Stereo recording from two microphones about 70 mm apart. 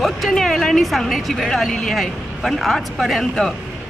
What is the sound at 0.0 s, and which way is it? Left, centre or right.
Speech, centre.